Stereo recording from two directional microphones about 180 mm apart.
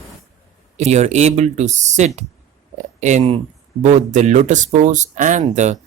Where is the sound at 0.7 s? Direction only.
40° right (ahead or behind).